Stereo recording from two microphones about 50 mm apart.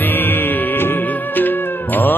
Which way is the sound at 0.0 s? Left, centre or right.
Left.